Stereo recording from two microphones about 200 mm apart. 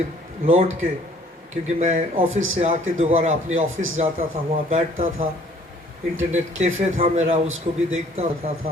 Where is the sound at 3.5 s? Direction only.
85° right.